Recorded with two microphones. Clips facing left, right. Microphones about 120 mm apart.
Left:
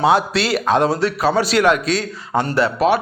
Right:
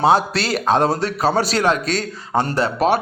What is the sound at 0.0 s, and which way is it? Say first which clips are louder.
Speech: even; 35° right (ahead or behind).